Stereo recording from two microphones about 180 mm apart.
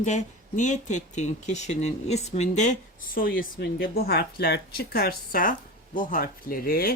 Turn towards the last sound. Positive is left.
turn(degrees=55)  # may be behind; listen again after turning